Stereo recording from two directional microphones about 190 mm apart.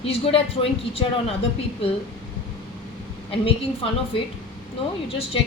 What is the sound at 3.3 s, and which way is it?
Speech, 30° left (ahead or behind).